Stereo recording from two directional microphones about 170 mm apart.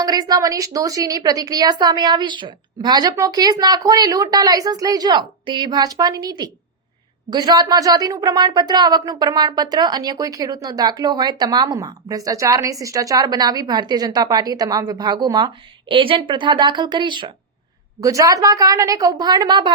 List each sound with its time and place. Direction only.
0.0 s speech: 20° right (ahead or behind)